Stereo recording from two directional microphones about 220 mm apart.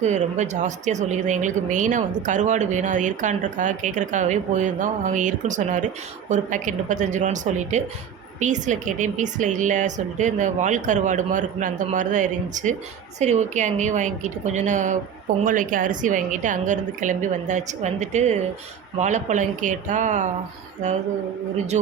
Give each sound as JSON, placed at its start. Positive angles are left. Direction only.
{"t": 0.0, "sound": "speech", "side_deg": -30}